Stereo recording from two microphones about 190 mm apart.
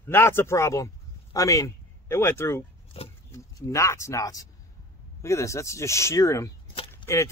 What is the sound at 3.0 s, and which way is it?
Speech, 30° left (ahead or behind).